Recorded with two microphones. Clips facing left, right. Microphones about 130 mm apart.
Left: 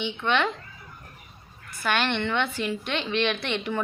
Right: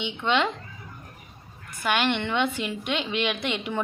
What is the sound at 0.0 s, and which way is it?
Speech, 15° right (ahead or behind).